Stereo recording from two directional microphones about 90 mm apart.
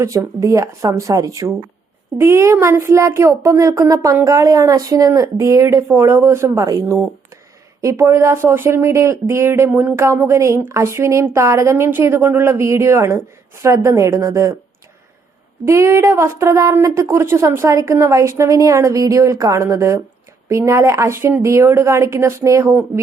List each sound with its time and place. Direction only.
0.0 s speech: 35° right (ahead or behind)
15.6 s speech: 35° right (ahead or behind)